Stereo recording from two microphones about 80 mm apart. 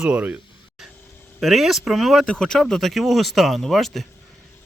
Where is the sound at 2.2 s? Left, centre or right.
Centre.